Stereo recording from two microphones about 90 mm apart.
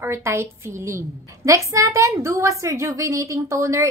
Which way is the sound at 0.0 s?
30° right (ahead or behind).